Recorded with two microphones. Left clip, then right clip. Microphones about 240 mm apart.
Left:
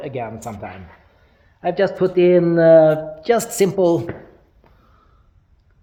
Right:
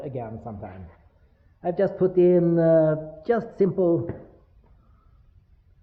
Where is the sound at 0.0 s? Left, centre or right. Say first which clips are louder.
Left 7 dB; left.